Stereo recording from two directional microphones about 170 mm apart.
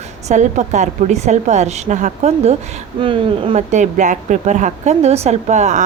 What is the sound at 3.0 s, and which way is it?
Speech, 30° right (ahead or behind).